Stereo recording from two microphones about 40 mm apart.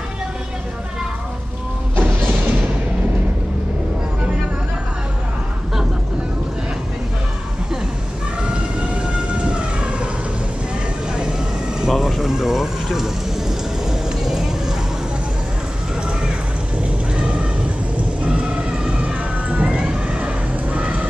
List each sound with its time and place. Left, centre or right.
2.0 s music: right
9.1 s vehicle: right
11.1 s vehicle: centre
12.1 s a sound: centre
17.1 s a sound: right
18.2 s emergency vehicle: right